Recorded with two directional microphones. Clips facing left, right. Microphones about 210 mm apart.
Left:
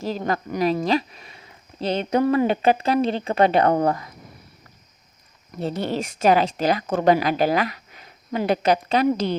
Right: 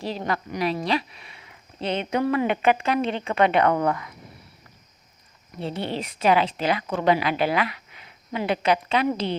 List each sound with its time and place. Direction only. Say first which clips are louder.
0.0 s speech: left 3 dB; 45° left (ahead or behind)
5.5 s speech: left 4 dB; 40° left (ahead or behind)